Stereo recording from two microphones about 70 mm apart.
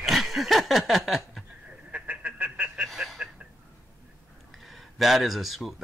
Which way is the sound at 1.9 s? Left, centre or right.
Right.